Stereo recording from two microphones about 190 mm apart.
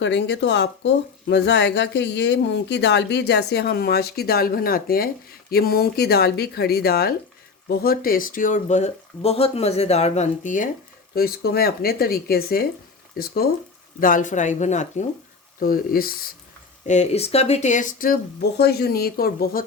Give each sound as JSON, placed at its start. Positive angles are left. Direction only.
{"t": 0.0, "sound": "speech", "side_deg": 65}
{"t": 11.1, "sound": "speech", "side_deg": 55}
{"t": 15.6, "sound": "speech", "side_deg": 50}
{"t": 16.8, "sound": "speech", "side_deg": 35}